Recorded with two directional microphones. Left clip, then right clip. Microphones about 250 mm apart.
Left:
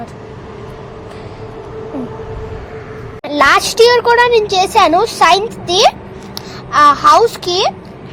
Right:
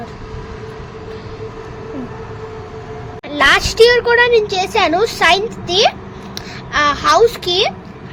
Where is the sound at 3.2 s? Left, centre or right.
Centre.